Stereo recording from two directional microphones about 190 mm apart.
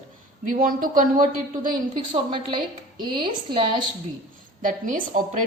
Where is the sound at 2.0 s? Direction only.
25° right (ahead or behind).